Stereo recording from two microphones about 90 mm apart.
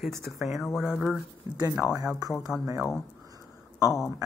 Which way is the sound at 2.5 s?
Centre (ahead or behind).